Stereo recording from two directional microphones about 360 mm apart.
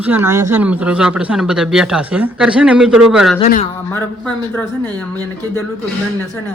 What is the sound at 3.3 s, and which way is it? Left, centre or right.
Speech, centre.